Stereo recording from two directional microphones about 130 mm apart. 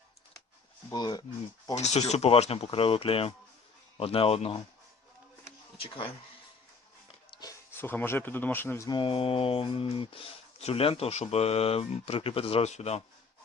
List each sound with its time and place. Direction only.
0.9 s speech: 30° left (ahead or behind)
1.7 s speech: 60° left (ahead or behind)
7.7 s speech: 15° left (ahead or behind)
8.9 s speech: 40° left (ahead or behind); by 13.0 s 55° left (ahead or behind)